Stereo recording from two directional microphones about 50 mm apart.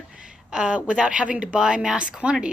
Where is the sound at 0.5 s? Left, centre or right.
Centre.